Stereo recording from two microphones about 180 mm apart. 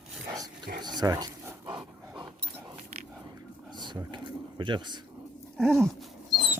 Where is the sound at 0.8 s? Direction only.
20° right (ahead or behind).